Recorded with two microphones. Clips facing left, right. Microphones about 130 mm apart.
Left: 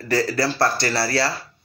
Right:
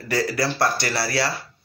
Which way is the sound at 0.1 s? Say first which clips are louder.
Left 2 dB; 15° right (ahead or behind).